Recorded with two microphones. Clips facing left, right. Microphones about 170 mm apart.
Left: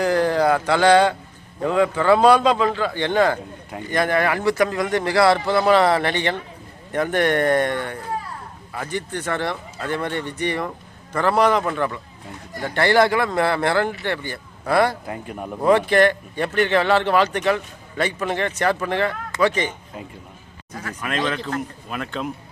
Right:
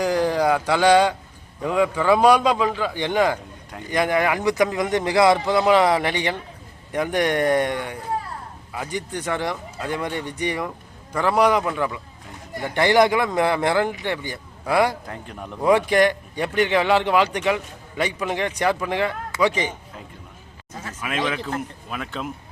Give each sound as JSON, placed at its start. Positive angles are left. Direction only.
{"t": 0.0, "sound": "speech", "side_deg": -15}
{"t": 15.0, "sound": "a man's voice", "side_deg": 10}
{"t": 15.6, "sound": "speech", "side_deg": -10}
{"t": 21.0, "sound": "speech", "side_deg": -5}